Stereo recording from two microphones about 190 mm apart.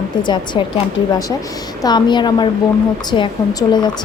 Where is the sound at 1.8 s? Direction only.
20° left (ahead or behind).